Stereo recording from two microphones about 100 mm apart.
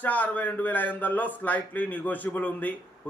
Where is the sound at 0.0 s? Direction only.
15° left (ahead or behind).